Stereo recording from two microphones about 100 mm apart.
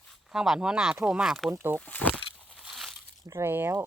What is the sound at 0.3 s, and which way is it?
Speech, 5° right (ahead or behind).